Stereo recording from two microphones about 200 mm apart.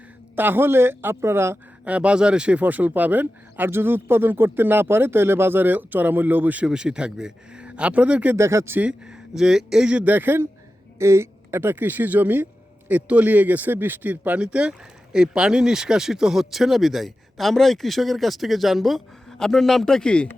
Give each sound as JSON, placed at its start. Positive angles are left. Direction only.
{"t": 0.3, "sound": "a man's voice", "side_deg": -10}